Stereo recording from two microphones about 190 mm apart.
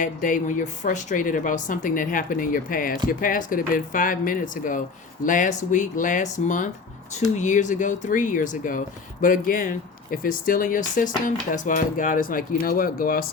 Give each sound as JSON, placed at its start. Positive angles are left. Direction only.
{"t": 0.0, "sound": "speech", "side_deg": 45}